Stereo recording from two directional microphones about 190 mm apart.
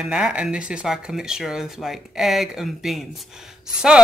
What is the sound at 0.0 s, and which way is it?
Speech, 5° right (ahead or behind).